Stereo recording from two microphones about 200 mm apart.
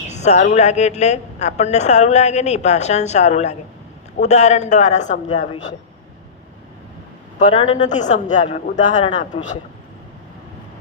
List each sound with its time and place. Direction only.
0.1 s a woman's voice: 35° left (ahead or behind)
7.3 s a woman's voice: 35° left (ahead or behind)